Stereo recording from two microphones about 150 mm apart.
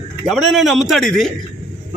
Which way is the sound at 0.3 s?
Centre (ahead or behind).